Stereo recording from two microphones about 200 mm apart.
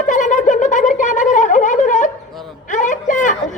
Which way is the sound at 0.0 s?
40° left (ahead or behind).